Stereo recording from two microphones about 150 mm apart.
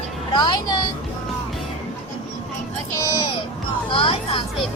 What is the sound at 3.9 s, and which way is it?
Music, 35° left (ahead or behind).